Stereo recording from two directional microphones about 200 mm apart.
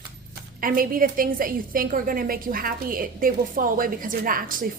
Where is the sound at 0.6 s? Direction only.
45° right (ahead or behind).